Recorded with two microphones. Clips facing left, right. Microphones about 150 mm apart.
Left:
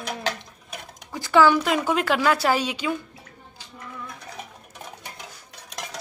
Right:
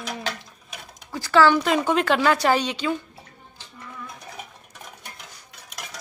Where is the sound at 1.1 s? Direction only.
15° left (ahead or behind).